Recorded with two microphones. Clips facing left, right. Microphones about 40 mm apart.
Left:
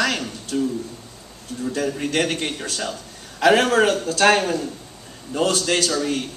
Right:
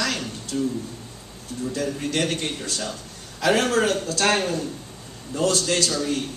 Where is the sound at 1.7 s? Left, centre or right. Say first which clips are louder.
Left 3 dB; left.